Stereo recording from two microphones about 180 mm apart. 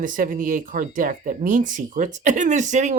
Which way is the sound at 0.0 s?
45° right (ahead or behind).